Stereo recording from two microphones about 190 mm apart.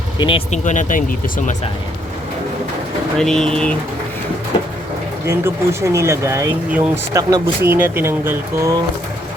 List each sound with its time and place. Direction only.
0.2 s speech: 30° left (ahead or behind)
3.2 s speech: 5° left (ahead or behind)
5.2 s speech: 15° right (ahead or behind)